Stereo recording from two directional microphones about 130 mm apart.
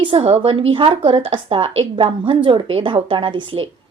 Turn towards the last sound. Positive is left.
turn(degrees=-40)  # may be behind; listen again after turning